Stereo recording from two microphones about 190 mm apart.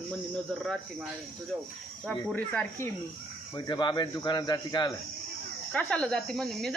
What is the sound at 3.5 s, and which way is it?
Speech, 25° left (ahead or behind).